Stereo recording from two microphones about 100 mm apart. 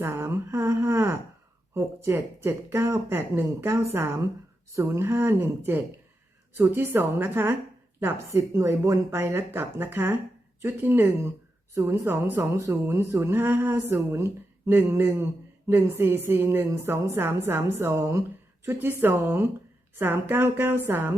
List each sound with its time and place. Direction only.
0.0 s a woman's voice: 25° right (ahead or behind)